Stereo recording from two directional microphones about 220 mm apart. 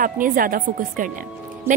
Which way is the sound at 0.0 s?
40° right (ahead or behind).